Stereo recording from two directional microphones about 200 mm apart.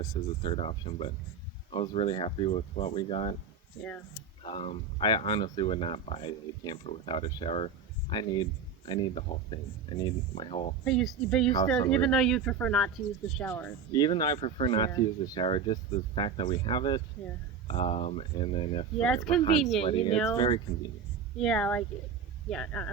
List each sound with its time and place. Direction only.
0.4 s speech: 30° left (ahead or behind)
4.4 s speech: 30° left (ahead or behind)
10.8 s speech: centre (ahead or behind)
13.9 s speech: 20° left (ahead or behind)
18.9 s speech: 5° left (ahead or behind)
19.9 s speech: 25° left (ahead or behind)
21.3 s speech: 5° left (ahead or behind)